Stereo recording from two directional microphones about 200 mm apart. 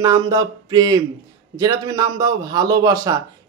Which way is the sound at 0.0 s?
15° right (ahead or behind).